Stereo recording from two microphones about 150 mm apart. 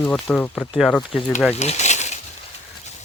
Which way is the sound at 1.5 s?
45° left (ahead or behind).